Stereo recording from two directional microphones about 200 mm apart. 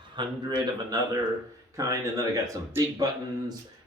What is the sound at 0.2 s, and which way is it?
Speech, 20° right (ahead or behind).